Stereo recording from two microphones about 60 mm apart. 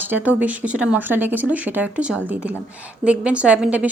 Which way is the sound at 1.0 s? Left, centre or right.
Right.